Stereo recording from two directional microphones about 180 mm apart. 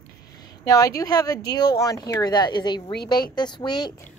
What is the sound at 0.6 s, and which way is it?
A woman's voice, 20° left (ahead or behind).